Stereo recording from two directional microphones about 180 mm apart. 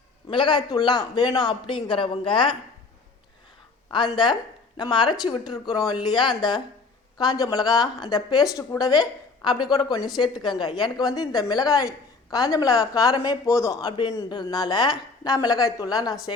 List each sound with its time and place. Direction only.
0.3 s speech: 25° left (ahead or behind)
3.8 s speech: 25° left (ahead or behind)